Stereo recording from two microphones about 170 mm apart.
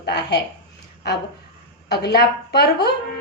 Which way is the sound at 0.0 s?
75° left (ahead or behind).